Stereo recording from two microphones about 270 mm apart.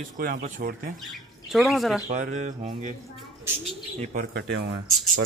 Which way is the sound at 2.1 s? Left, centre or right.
Right.